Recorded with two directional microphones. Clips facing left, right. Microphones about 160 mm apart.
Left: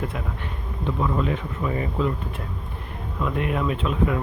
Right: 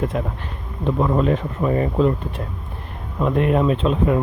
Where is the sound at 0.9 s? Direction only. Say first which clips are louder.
Right 6 dB; 45° right (ahead or behind).